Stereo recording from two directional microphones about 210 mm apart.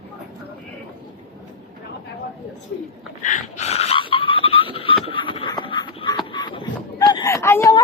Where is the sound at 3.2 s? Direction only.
35° left (ahead or behind).